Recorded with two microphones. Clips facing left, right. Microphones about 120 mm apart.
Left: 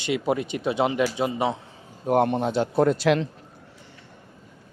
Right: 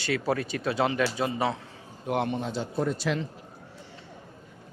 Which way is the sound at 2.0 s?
45° left (ahead or behind).